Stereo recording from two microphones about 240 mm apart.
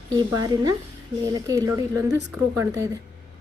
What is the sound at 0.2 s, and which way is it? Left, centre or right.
Speech, centre.